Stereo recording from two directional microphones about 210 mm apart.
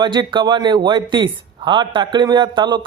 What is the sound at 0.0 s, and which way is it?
Speech, 20° right (ahead or behind).